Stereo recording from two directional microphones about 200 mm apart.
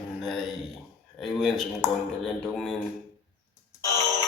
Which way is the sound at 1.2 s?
Centre (ahead or behind).